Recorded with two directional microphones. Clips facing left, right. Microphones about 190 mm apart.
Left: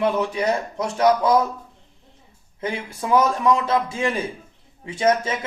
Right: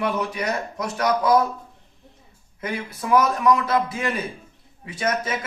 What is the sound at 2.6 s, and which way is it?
Speech, 25° left (ahead or behind).